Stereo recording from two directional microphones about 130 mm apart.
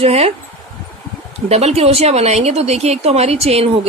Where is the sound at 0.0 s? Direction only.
50° right (ahead or behind).